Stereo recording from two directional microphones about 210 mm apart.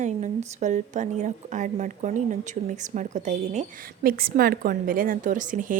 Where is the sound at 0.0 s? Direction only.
35° right (ahead or behind).